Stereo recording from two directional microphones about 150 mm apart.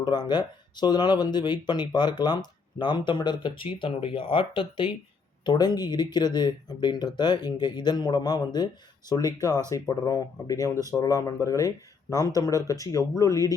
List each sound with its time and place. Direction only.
0.0 s speech: 30° left (ahead or behind)